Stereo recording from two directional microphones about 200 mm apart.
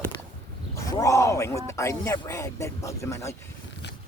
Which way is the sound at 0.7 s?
15° left (ahead or behind).